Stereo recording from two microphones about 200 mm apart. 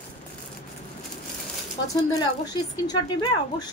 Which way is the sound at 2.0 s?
20° left (ahead or behind).